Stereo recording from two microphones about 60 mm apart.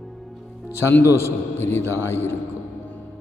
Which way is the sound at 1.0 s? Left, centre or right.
Left.